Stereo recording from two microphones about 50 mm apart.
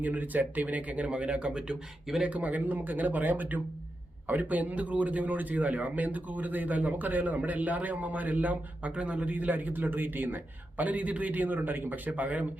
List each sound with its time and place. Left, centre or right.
0.0 s speech: right; by 1.7 s centre
2.2 s a man's voice: right